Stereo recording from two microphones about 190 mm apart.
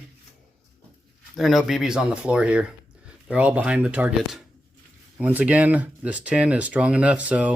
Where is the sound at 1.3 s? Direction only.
Centre (ahead or behind).